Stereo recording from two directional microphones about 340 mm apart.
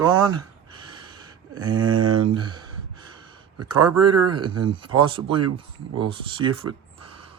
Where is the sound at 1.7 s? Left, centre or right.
Right.